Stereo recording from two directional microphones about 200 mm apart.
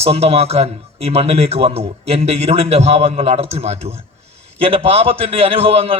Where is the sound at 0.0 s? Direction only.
30° right (ahead or behind).